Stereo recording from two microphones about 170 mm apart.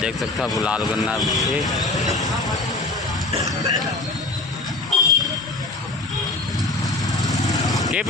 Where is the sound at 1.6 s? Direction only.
20° left (ahead or behind).